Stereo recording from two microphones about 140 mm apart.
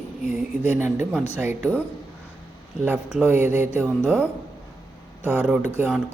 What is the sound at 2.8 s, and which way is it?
A man's voice, 5° right (ahead or behind).